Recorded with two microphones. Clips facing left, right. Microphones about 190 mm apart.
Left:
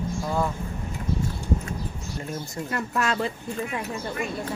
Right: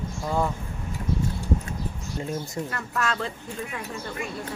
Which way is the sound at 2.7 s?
15° left (ahead or behind).